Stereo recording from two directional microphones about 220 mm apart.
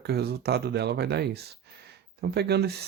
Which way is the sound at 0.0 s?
45° right (ahead or behind).